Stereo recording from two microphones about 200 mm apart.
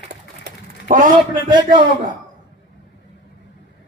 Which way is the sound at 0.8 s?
40° right (ahead or behind).